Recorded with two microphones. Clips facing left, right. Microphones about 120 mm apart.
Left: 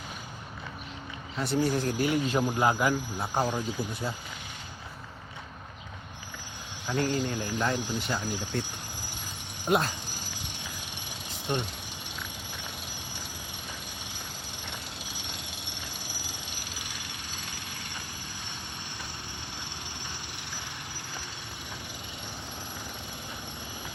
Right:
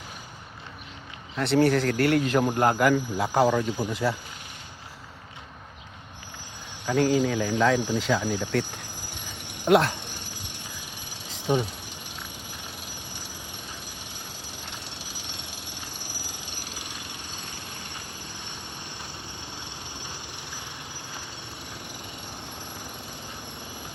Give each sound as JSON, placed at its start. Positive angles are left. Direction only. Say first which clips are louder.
{"t": 1.4, "sound": "speech", "louder": "right 6 dB", "side_deg": -70}
{"t": 2.6, "sound": "speech", "louder": "right 1 dB", "side_deg": -50}
{"t": 2.8, "sound": "speech", "louder": "right 6 dB", "side_deg": -90}
{"t": 6.8, "sound": "speech", "louder": "right 6 dB", "side_deg": -90}
{"t": 9.6, "sound": "speech", "louder": "right 6 dB", "side_deg": -70}